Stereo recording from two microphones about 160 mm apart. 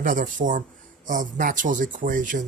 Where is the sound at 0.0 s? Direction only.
55° right (ahead or behind).